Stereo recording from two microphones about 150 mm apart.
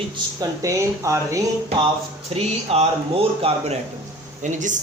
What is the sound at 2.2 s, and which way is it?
A man's voice, 40° right (ahead or behind).